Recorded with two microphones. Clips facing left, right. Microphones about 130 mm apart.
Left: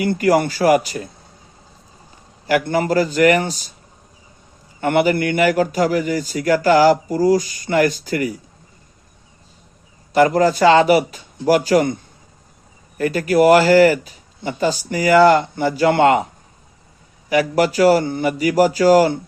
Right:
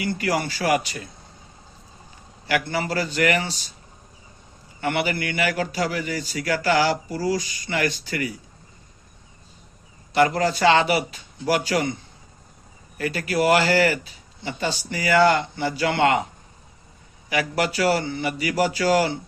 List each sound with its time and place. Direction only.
0.0 s a man's voice: 45° left (ahead or behind)
2.5 s a man's voice: 45° left (ahead or behind)
4.8 s a man's voice: 45° left (ahead or behind)
10.1 s a man's voice: 40° left (ahead or behind)
17.2 s a man's voice: 40° left (ahead or behind)